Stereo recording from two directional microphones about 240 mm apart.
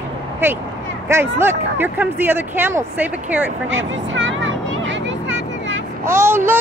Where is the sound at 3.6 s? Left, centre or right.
Right.